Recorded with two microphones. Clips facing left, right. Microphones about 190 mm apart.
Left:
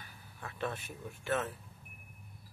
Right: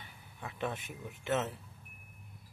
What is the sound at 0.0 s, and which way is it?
Speech, 15° right (ahead or behind).